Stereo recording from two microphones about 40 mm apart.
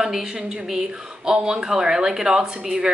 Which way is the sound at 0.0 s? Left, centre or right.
Centre.